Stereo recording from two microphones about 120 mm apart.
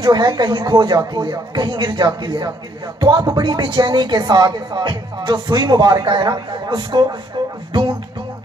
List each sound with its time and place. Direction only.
0.0 s a woman's voice: 35° right (ahead or behind)